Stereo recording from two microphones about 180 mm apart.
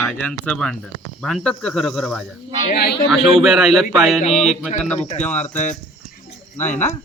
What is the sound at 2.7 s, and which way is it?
Speech, 65° left (ahead or behind).